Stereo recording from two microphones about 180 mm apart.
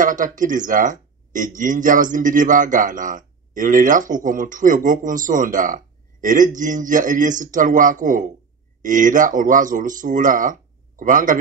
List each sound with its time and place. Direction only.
0.0 s a man's voice: 45° right (ahead or behind)